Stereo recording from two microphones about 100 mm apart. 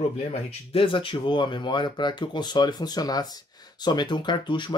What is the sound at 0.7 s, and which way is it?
Speech, 60° left (ahead or behind).